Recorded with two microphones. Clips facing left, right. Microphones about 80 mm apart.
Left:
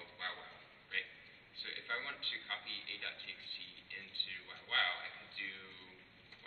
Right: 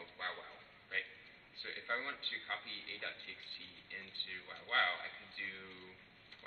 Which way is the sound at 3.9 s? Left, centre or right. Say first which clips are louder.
Right 1 dB; centre.